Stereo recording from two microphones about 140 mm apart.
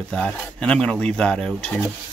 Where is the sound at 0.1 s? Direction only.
5° left (ahead or behind).